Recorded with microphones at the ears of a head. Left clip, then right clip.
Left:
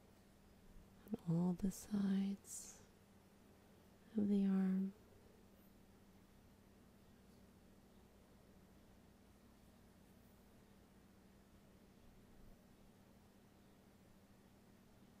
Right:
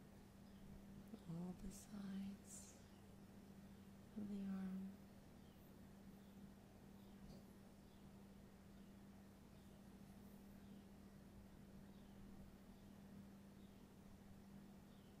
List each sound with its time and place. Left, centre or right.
1.1 s speech: left
4.1 s speech: left